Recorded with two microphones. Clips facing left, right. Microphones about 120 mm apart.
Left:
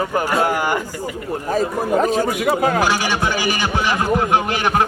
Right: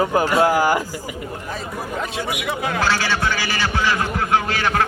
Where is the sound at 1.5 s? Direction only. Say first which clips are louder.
Left 12 dB; 40° left (ahead or behind).